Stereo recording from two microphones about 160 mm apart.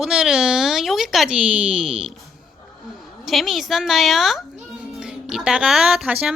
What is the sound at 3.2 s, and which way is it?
A woman's voice, centre (ahead or behind).